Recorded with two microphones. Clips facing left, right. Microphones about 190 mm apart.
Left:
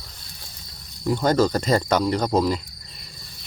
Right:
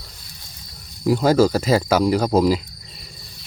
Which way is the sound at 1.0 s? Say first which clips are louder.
Right 4 dB; 5° right (ahead or behind).